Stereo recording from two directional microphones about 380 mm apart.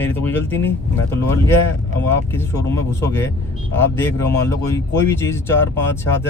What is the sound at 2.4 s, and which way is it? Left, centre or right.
Speech, centre.